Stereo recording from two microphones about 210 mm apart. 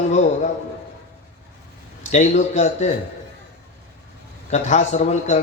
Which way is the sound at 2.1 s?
35° left (ahead or behind).